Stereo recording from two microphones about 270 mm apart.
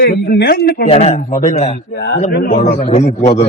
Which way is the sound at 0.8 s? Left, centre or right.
Left.